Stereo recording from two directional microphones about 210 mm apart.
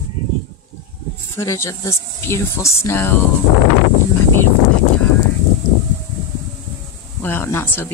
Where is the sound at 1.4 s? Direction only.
15° left (ahead or behind).